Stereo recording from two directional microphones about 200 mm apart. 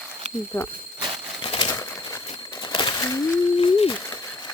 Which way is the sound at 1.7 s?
15° left (ahead or behind).